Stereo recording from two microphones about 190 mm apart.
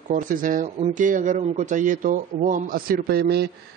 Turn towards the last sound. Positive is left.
turn(degrees=-55)  # may be behind; listen again after turning